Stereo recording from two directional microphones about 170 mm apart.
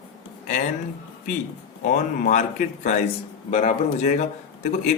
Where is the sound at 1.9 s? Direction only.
50° left (ahead or behind).